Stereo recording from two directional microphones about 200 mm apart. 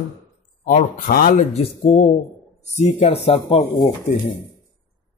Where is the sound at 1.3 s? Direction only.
35° left (ahead or behind).